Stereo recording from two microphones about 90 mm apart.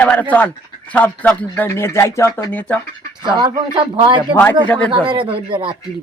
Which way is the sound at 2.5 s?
15° left (ahead or behind).